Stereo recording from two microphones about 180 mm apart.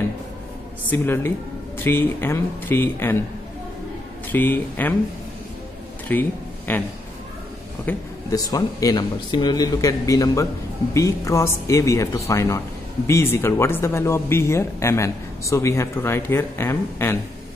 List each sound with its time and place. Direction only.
0.8 s speech: 10° left (ahead or behind)
4.3 s speech: 10° left (ahead or behind)
6.1 s speech: 10° left (ahead or behind)